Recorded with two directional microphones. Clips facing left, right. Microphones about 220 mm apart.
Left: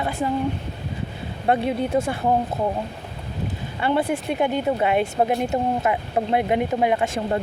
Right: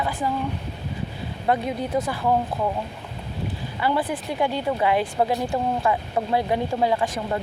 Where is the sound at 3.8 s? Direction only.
25° left (ahead or behind).